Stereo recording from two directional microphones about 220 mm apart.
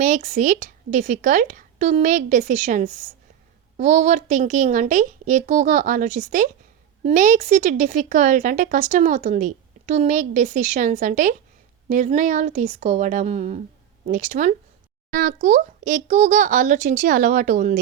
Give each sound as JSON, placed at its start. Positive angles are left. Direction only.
{"t": 0.0, "sound": "speech", "side_deg": -35}